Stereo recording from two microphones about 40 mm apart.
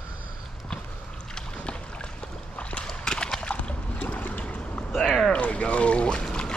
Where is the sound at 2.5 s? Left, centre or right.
Left.